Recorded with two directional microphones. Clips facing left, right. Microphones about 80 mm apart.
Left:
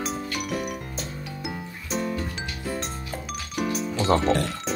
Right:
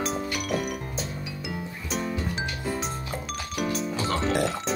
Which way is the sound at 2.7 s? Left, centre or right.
Centre.